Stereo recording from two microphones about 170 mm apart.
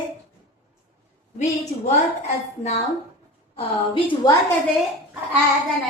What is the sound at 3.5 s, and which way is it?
Female singing, 30° left (ahead or behind).